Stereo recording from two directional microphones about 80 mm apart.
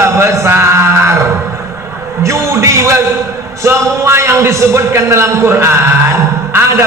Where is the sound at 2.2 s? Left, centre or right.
Right.